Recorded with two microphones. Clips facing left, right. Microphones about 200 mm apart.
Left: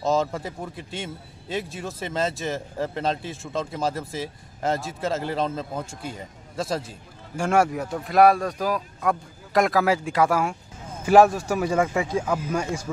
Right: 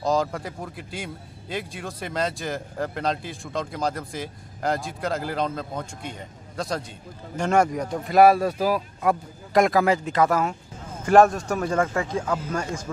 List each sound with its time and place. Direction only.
0.0 s speech: centre (ahead or behind)